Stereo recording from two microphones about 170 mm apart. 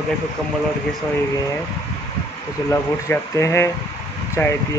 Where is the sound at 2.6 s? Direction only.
15° left (ahead or behind).